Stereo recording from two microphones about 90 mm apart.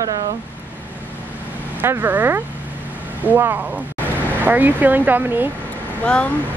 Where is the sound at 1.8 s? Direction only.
25° right (ahead or behind).